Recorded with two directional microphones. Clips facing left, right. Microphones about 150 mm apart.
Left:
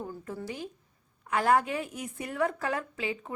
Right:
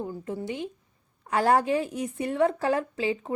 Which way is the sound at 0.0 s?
15° right (ahead or behind).